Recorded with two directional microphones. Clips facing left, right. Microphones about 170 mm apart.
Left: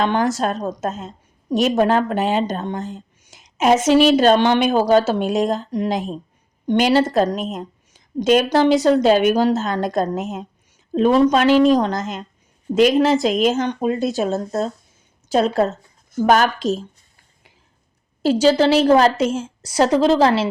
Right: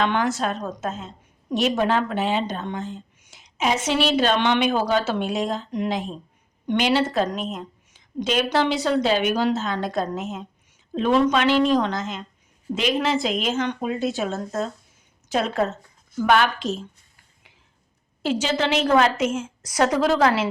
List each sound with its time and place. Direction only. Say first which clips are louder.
0.0 s a woman's voice: left 4 dB; 40° left (ahead or behind)
18.2 s a woman's voice: left 8 dB; 35° left (ahead or behind)